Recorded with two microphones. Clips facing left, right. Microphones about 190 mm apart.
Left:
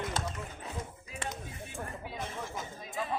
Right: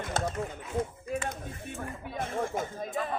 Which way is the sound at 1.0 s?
55° right (ahead or behind).